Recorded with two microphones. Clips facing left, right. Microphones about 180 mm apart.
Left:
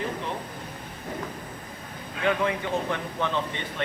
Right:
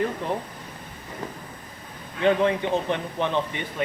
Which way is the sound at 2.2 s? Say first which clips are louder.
Right 5 dB; 25° right (ahead or behind).